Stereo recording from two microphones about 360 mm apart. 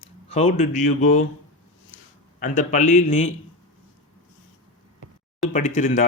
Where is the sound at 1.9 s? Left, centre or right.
Left.